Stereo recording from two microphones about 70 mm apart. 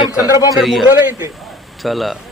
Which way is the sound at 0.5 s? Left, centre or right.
Centre.